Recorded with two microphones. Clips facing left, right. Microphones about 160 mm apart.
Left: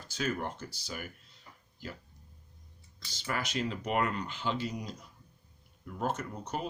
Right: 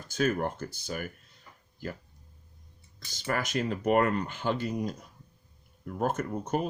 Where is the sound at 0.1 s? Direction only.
50° right (ahead or behind).